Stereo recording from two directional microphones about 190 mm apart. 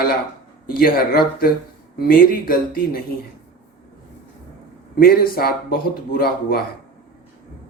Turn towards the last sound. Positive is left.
turn(degrees=50)  # may be behind; listen again after turning